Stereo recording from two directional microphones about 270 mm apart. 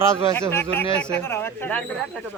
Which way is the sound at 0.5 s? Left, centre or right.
Centre.